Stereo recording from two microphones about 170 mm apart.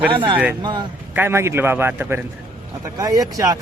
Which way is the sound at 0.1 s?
30° right (ahead or behind).